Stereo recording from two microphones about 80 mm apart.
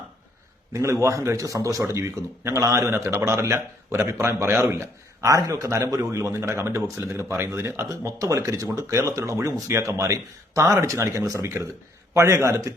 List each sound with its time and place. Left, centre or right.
0.7 s speech: right